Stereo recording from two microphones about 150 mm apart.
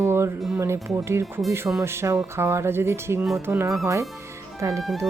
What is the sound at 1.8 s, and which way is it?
Music, 15° right (ahead or behind).